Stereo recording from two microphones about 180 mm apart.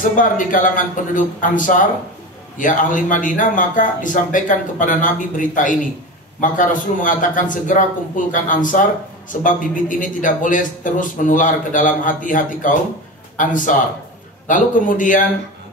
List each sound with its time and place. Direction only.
0.0 s a man's voice: 45° left (ahead or behind)